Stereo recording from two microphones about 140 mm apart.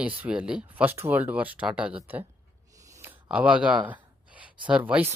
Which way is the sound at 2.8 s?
20° right (ahead or behind).